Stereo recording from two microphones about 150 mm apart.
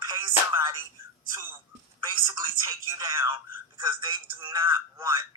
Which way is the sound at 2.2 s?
25° right (ahead or behind).